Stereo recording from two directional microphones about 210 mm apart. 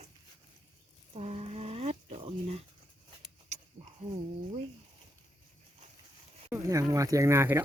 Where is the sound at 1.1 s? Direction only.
30° right (ahead or behind).